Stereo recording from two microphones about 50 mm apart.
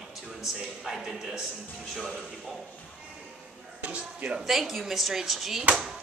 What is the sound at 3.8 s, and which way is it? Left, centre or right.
Speech, right.